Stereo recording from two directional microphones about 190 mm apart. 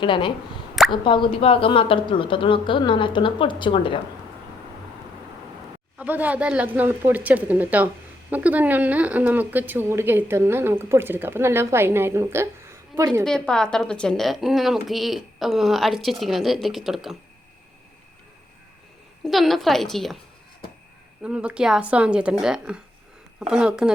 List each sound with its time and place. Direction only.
0.0 s speech: 25° left (ahead or behind)
6.0 s speech: 10° right (ahead or behind)
13.2 s a woman's voice: 5° left (ahead or behind)
19.2 s a woman's voice: centre (ahead or behind)
21.2 s a woman's voice: 5° right (ahead or behind)